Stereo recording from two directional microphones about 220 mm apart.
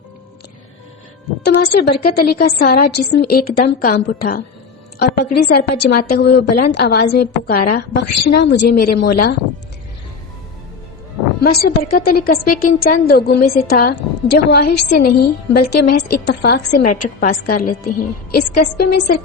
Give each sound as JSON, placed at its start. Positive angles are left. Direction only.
{"t": 1.7, "sound": "a woman's voice", "side_deg": 45}
{"t": 11.4, "sound": "a woman's voice", "side_deg": 45}